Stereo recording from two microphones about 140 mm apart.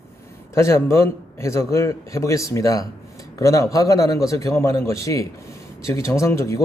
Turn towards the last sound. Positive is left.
turn(degrees=20)  # may be behind; listen again after turning